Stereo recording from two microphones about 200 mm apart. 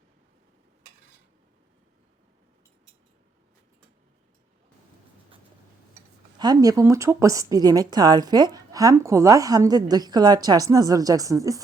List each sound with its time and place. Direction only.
6.4 s speech: 20° right (ahead or behind)